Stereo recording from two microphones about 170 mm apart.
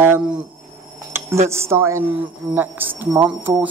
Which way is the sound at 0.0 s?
10° right (ahead or behind).